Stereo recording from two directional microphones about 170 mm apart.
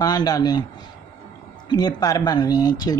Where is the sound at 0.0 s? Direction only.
20° left (ahead or behind).